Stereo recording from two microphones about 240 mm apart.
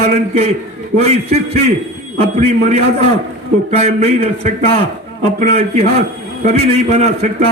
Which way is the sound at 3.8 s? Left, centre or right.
Right.